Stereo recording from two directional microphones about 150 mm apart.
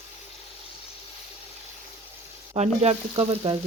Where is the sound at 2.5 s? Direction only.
45° right (ahead or behind).